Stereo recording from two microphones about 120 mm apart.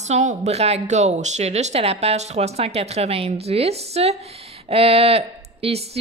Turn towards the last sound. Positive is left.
turn(degrees=-60)  # may be behind; listen again after turning